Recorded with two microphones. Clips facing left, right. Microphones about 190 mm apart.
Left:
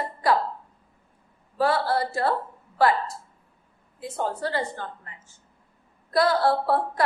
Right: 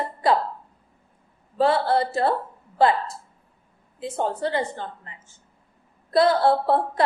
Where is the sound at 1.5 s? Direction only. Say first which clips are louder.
Right 3 dB; 25° right (ahead or behind).